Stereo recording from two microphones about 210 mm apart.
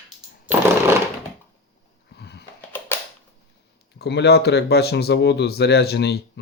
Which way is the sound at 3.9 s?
50° left (ahead or behind).